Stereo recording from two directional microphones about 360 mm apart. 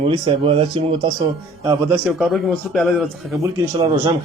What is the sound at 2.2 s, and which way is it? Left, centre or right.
Speech, centre.